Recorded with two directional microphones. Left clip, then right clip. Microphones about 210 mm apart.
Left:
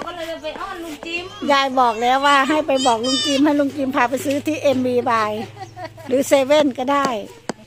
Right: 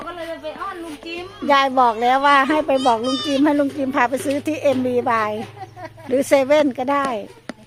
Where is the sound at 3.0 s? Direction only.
40° left (ahead or behind).